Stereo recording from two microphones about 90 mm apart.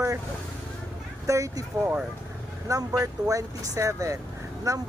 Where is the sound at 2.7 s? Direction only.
40° right (ahead or behind).